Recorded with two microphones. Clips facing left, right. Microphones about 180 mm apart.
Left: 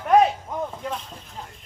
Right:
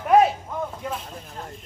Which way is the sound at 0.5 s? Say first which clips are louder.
Left 1 dB; 20° left (ahead or behind).